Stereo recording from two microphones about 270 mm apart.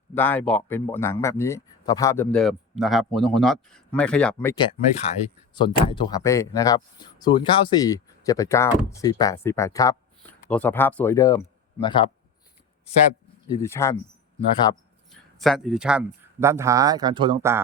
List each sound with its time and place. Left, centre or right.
0.1 s a man's voice: centre
4.5 s a man's voice: left
13.5 s a man's voice: centre
15.4 s speech: centre